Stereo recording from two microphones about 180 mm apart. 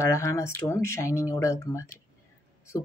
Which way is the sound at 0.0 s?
15° left (ahead or behind).